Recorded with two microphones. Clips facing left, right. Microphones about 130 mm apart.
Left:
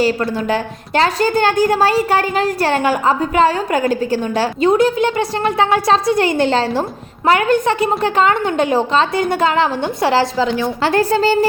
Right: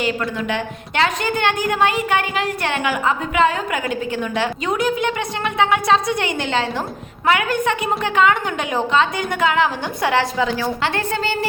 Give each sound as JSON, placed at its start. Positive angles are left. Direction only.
{"t": 0.0, "sound": "a woman's voice", "side_deg": 35}